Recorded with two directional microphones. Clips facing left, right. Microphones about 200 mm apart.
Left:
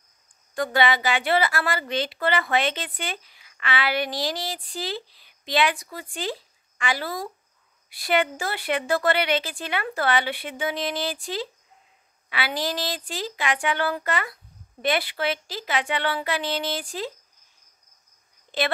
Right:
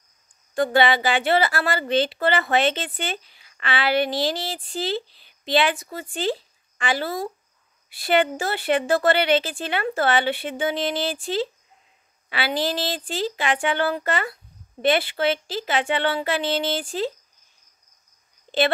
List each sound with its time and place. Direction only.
0.6 s a woman's voice: 30° right (ahead or behind)